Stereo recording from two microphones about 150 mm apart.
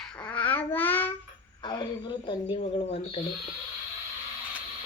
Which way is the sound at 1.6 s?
30° left (ahead or behind).